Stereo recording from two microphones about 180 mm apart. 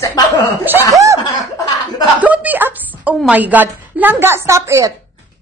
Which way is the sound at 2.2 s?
10° right (ahead or behind).